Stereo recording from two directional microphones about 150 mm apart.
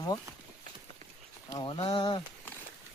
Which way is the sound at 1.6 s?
35° left (ahead or behind).